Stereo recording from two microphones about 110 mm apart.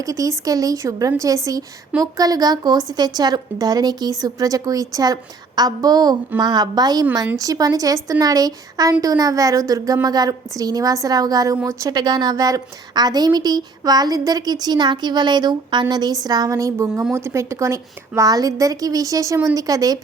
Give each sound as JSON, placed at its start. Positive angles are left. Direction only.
{"t": 0.0, "sound": "a woman's voice", "side_deg": -30}